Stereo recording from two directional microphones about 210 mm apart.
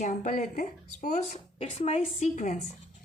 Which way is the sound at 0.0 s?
35° left (ahead or behind).